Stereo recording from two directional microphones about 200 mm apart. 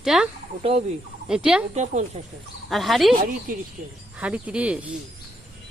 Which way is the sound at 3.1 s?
45° right (ahead or behind).